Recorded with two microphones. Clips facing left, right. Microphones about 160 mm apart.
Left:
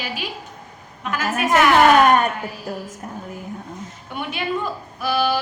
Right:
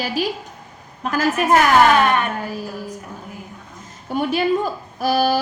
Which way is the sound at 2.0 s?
40° left (ahead or behind).